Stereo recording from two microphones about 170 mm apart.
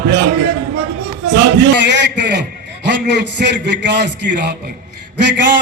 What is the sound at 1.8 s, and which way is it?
A man's voice, 90° right.